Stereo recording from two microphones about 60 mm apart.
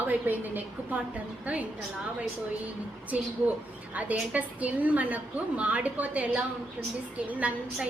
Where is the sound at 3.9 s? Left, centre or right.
Right.